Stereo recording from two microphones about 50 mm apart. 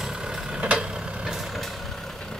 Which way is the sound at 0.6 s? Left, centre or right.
Right.